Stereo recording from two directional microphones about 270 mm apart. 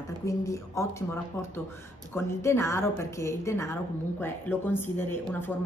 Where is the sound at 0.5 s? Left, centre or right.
Centre.